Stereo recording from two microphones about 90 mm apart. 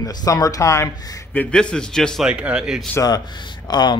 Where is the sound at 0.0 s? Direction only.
45° left (ahead or behind).